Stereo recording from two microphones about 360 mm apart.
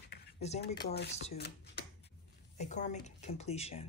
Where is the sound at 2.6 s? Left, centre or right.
Centre.